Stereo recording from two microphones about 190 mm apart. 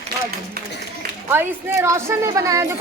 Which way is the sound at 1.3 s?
10° right (ahead or behind).